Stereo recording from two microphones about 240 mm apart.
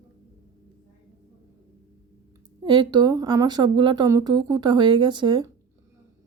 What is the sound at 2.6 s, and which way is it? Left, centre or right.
Speech, centre.